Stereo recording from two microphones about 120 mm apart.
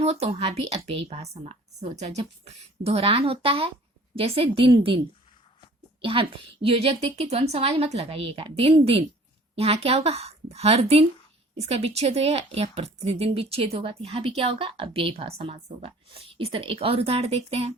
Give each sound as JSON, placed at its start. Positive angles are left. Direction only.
{"t": 0.0, "sound": "a woman's voice", "side_deg": -60}
{"t": 6.0, "sound": "a woman's voice", "side_deg": -50}